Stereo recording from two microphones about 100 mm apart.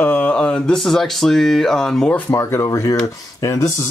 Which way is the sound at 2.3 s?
30° left (ahead or behind).